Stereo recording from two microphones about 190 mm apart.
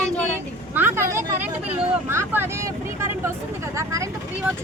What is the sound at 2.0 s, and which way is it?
Speech, 10° right (ahead or behind).